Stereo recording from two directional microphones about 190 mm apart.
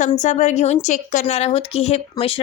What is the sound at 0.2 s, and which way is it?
A woman's voice, 35° left (ahead or behind).